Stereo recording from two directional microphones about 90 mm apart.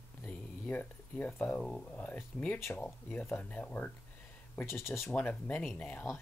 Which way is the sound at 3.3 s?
20° left (ahead or behind).